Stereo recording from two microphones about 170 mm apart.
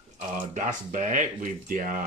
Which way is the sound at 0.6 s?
45° right (ahead or behind).